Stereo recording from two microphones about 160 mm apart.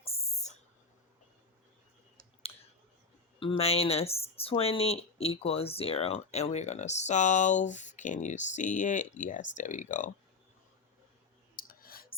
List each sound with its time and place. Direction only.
0.0 s a sound: 40° left (ahead or behind)
3.4 s speech: 35° left (ahead or behind); by 10.1 s 50° left (ahead or behind)
11.5 s clicking: 65° left (ahead or behind)